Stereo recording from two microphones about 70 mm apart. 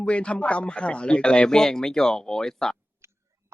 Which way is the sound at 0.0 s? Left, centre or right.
Centre.